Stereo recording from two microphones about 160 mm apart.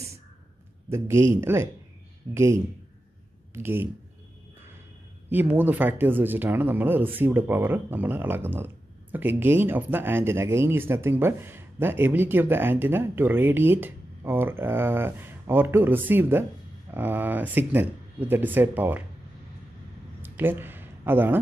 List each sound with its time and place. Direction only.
0.8 s speech: 15° right (ahead or behind)
5.3 s speech: 10° right (ahead or behind)
20.2 s a sound: 15° right (ahead or behind)